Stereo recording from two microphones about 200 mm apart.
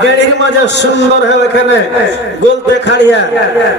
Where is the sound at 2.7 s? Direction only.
60° left (ahead or behind).